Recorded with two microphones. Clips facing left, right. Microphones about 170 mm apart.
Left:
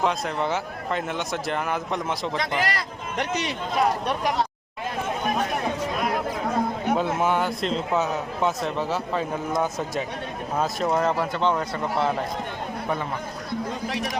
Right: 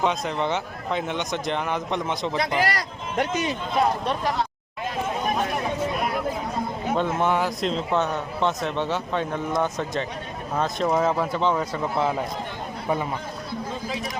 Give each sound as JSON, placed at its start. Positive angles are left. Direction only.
{"t": 0.0, "sound": "a man's voice", "side_deg": 0}
{"t": 2.6, "sound": "speech", "side_deg": -40}
{"t": 4.0, "sound": "speech", "side_deg": 15}
{"t": 6.9, "sound": "a man's voice", "side_deg": 5}
{"t": 13.8, "sound": "speech", "side_deg": 75}